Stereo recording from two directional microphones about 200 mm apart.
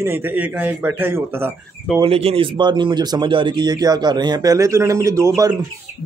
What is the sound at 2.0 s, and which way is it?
A man's voice, 30° right (ahead or behind).